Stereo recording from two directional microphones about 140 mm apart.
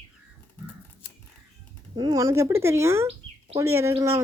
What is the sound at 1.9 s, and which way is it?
Speech, 30° right (ahead or behind).